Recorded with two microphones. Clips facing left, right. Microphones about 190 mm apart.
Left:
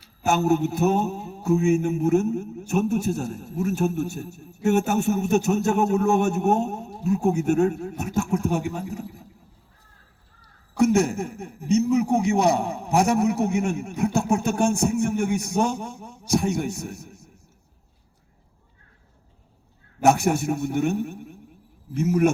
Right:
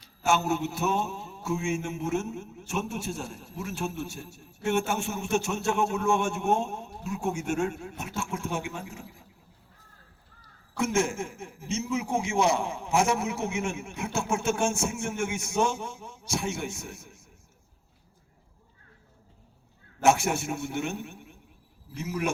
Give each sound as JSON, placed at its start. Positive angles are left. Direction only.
{"t": 0.3, "sound": "mantra", "side_deg": 40}
{"t": 10.8, "sound": "mantra", "side_deg": 40}
{"t": 20.1, "sound": "mantra", "side_deg": 40}
{"t": 21.9, "sound": "a man's voice", "side_deg": 45}